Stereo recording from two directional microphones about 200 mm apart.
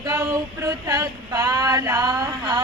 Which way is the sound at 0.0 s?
15° right (ahead or behind).